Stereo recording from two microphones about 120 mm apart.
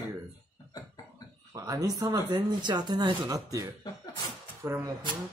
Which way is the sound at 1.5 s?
30° right (ahead or behind).